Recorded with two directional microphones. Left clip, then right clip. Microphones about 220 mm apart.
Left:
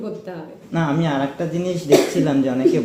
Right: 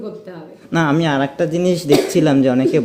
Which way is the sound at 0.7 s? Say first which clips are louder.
Right 5 dB; 50° right (ahead or behind).